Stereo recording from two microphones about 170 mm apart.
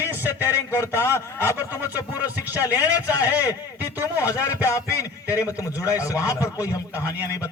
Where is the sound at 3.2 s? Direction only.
10° right (ahead or behind).